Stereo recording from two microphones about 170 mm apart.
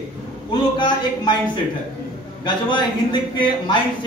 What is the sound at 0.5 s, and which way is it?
A man's voice, 25° left (ahead or behind).